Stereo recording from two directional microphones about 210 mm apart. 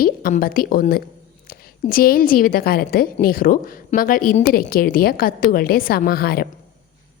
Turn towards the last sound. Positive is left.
turn(degrees=50)  # may be behind; listen again after turning